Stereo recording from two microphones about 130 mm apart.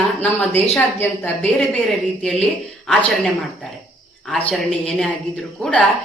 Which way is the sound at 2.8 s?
5° left (ahead or behind).